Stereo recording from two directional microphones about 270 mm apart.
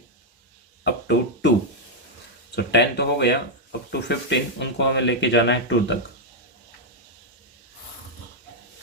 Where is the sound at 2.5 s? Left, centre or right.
Left.